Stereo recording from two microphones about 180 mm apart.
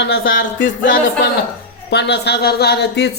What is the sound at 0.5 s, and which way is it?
Music, 90° left.